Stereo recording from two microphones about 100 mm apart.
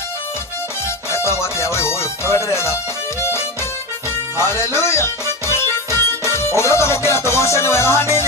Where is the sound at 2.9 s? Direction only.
25° left (ahead or behind).